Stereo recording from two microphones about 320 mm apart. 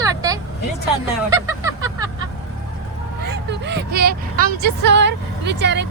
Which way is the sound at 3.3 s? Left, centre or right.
Right.